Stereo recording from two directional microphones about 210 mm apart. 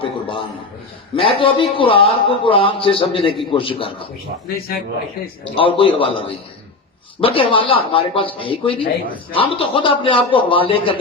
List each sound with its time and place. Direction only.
0.0 s a man's voice: 25° left (ahead or behind)
5.5 s a man's voice: 25° left (ahead or behind)